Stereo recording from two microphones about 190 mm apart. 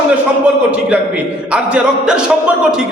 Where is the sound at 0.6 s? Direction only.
5° right (ahead or behind).